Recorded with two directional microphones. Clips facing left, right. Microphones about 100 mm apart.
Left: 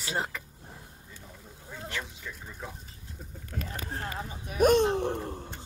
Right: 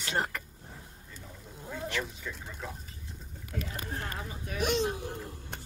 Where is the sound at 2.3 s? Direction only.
5° right (ahead or behind).